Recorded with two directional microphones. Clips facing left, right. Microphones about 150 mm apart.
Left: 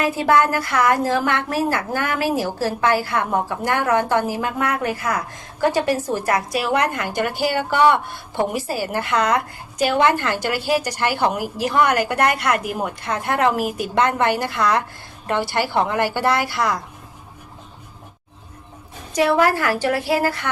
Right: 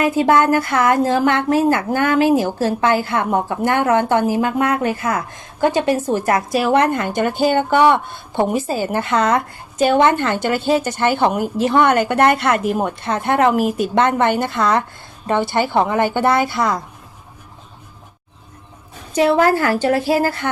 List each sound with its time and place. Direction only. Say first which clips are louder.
0.0 s a woman's voice: right 3 dB; 25° right (ahead or behind)
19.1 s a woman's voice: right 3 dB; 25° right (ahead or behind)